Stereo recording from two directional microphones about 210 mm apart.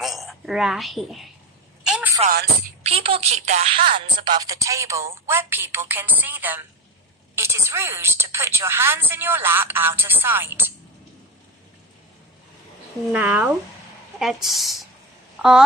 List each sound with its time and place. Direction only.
0.0 s a woman's voice: centre (ahead or behind)
1.8 s telephone: 5° right (ahead or behind)
2.8 s a woman's voice: 25° right (ahead or behind); by 10.7 s 10° right (ahead or behind)
13.1 s a woman's voice: 10° right (ahead or behind)